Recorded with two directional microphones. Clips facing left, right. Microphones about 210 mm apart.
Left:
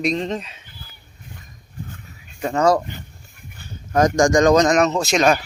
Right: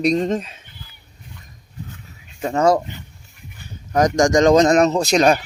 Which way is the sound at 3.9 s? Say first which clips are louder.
Even; 20° right (ahead or behind).